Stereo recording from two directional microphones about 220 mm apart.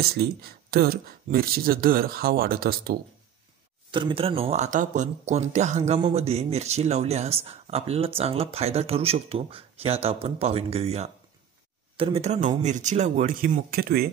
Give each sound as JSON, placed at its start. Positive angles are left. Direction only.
{"t": 0.0, "sound": "speech", "side_deg": -45}
{"t": 3.9, "sound": "speech", "side_deg": -25}